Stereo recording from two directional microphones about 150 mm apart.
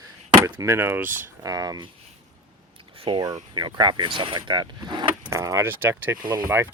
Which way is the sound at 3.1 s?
35° right (ahead or behind).